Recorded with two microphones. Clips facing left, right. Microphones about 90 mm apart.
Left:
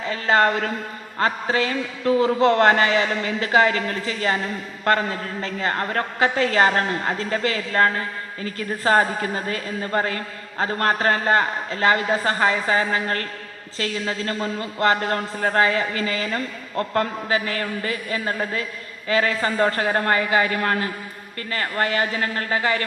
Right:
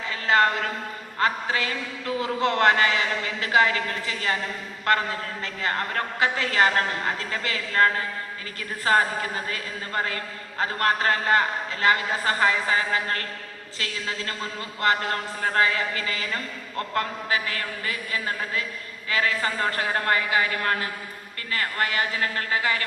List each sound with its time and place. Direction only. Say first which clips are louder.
0.1 s a man's voice: left 3 dB; 35° left (ahead or behind)
5.4 s a man's voice: left 4 dB; 35° left (ahead or behind)